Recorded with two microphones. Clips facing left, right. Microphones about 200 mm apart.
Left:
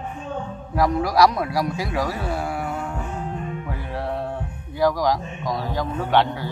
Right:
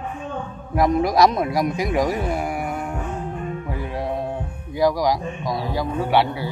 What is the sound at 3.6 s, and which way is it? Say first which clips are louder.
Music: right 3 dB; 15° right (ahead or behind).